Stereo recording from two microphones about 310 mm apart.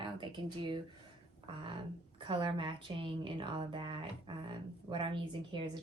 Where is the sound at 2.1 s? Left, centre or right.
Centre.